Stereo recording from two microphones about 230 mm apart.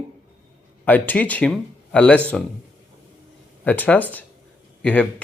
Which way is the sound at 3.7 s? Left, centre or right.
Centre.